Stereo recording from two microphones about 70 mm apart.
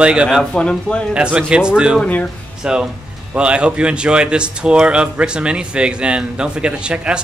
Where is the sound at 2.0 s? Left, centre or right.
Centre.